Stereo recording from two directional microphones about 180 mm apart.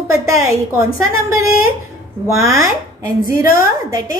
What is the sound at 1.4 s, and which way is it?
Speech, 55° left (ahead or behind).